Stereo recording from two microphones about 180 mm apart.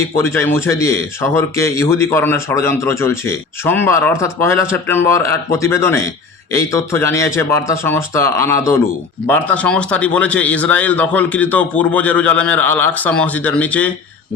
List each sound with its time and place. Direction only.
0.2 s speech: 15° left (ahead or behind)